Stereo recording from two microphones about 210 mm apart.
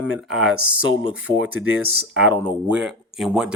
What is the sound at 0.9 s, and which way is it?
Speech, 80° right.